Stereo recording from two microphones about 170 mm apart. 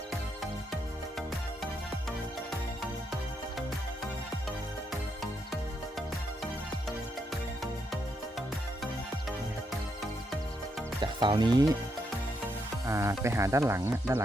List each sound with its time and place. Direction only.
4.9 s music: centre (ahead or behind)
11.0 s speech: 25° right (ahead or behind)
12.9 s speech: 15° right (ahead or behind)